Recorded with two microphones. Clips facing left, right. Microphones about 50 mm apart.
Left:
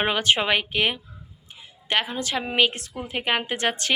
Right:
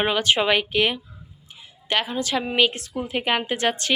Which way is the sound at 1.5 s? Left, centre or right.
Left.